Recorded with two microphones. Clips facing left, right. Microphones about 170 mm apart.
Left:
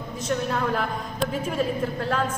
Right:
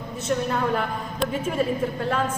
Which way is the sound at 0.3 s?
Centre (ahead or behind).